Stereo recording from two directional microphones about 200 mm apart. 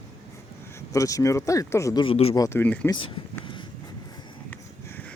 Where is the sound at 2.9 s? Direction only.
25° left (ahead or behind).